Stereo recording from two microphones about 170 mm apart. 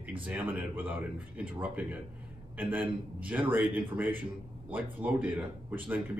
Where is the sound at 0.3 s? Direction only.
10° right (ahead or behind).